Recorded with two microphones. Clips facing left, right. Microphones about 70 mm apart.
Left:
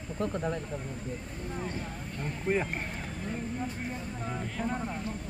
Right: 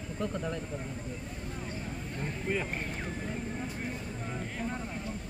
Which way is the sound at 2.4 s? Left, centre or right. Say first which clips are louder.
Left 4 dB; left.